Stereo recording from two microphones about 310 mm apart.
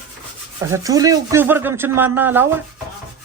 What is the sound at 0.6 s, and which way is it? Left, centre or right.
Speech, centre.